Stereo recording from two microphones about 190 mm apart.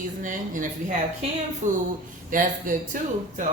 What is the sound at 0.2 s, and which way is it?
A woman's voice, 45° right (ahead or behind).